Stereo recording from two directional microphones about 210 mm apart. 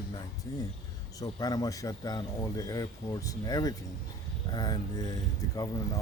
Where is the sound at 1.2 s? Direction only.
20° left (ahead or behind).